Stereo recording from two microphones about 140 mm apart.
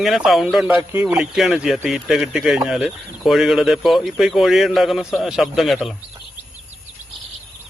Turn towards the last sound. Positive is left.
turn(degrees=0)  # may be behind; listen again after turning